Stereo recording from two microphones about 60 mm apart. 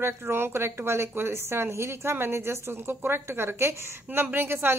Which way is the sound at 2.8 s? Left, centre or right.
Right.